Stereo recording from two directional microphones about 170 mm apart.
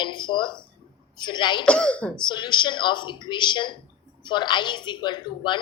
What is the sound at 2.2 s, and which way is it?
A woman's voice, 25° left (ahead or behind).